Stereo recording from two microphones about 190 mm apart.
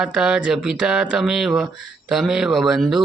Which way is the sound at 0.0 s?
5° right (ahead or behind).